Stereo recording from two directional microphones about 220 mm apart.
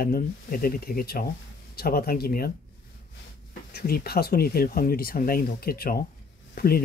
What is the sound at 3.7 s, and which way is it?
Speech, 45° left (ahead or behind).